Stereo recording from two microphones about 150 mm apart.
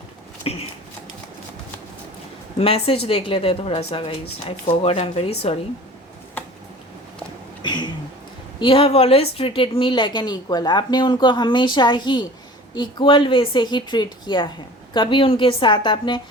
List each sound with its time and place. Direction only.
0.4 s a woman's voice: 40° left (ahead or behind)
2.6 s a woman's voice: 40° left (ahead or behind)
7.6 s a sound: 30° left (ahead or behind)
8.6 s a woman's voice: 35° left (ahead or behind)